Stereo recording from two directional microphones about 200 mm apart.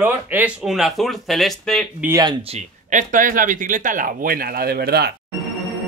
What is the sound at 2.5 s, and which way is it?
Speech, 40° right (ahead or behind).